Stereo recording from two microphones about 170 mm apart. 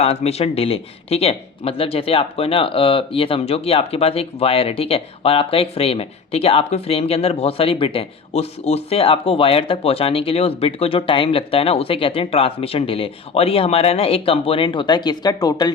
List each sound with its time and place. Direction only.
0.0 s speech: 35° left (ahead or behind)